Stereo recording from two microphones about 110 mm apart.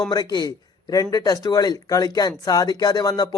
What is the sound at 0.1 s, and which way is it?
A man's voice, 40° left (ahead or behind).